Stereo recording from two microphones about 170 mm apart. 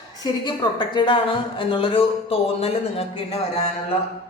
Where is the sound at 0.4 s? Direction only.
25° left (ahead or behind).